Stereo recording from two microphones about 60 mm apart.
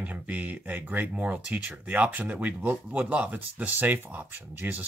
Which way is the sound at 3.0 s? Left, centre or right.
Right.